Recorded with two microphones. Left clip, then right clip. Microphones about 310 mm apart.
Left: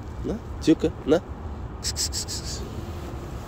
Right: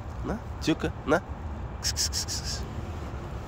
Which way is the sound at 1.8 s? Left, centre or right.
Centre.